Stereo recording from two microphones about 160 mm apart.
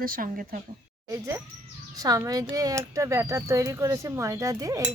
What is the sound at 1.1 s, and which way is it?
Speech, 20° right (ahead or behind).